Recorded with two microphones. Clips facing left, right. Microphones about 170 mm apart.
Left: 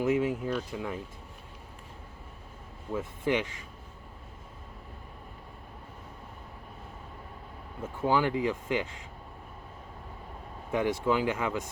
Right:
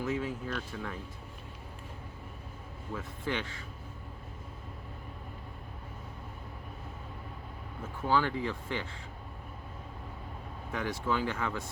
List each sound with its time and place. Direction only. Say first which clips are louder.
0.0 s speech: left 7 dB; 20° left (ahead or behind)
2.9 s speech: left 7 dB; 20° left (ahead or behind)
8.0 s speech: left 3 dB; 15° left (ahead or behind)
10.7 s speech: left 6 dB; 20° left (ahead or behind)